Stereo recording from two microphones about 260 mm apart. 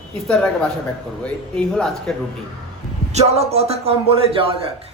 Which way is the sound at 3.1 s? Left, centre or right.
Right.